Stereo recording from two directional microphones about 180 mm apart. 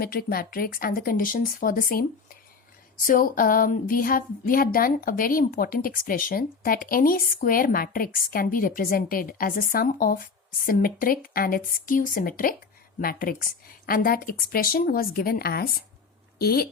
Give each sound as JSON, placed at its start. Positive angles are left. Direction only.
{"t": 0.0, "sound": "speech", "side_deg": 55}
{"t": 3.1, "sound": "speech", "side_deg": 50}